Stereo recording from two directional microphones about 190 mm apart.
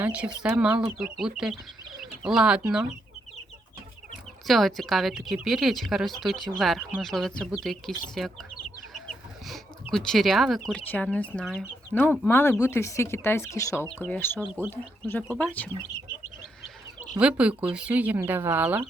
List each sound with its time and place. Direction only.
0.0 s a woman's voice: 5° right (ahead or behind)
4.4 s a woman's voice: centre (ahead or behind)
9.5 s speech: centre (ahead or behind)
14.4 s speech: 10° right (ahead or behind)
14.7 s speech: 10° left (ahead or behind)
17.2 s speech: 5° right (ahead or behind)